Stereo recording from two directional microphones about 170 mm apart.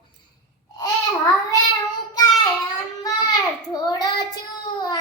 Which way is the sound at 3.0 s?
20° left (ahead or behind).